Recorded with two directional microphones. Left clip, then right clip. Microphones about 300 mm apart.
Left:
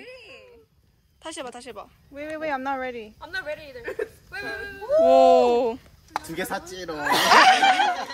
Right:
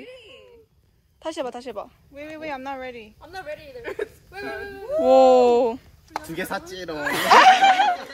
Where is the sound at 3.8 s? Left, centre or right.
Centre.